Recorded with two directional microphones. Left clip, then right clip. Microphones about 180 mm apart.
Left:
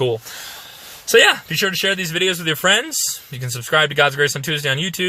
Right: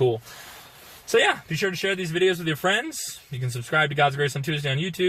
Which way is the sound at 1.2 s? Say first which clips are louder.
Left 8 dB; 20° left (ahead or behind).